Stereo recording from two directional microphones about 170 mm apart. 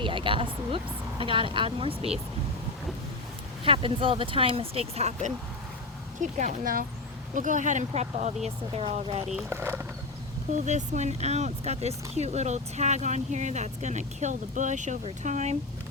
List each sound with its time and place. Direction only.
0.0 s speech: 30° right (ahead or behind)
3.6 s speech: 30° right (ahead or behind)
9.5 s speech: 15° right (ahead or behind)
10.5 s speech: 45° right (ahead or behind)